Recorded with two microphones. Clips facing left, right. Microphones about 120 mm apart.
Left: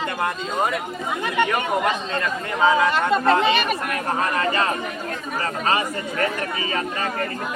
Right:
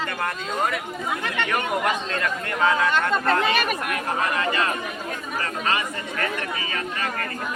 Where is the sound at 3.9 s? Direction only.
35° left (ahead or behind).